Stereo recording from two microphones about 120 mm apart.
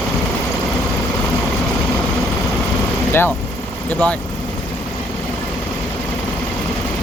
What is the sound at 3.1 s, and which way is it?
Vehicle, 20° left (ahead or behind).